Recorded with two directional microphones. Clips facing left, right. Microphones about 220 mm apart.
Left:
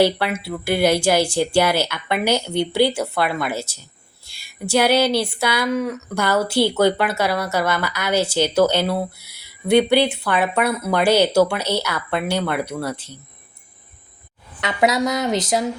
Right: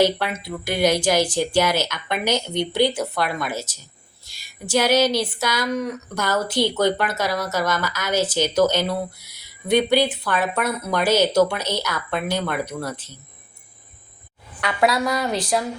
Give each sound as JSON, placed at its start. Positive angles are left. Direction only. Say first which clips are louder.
{"t": 0.0, "sound": "speech", "louder": "left 2 dB", "side_deg": 10}
{"t": 14.6, "sound": "speech", "louder": "left 2 dB", "side_deg": 20}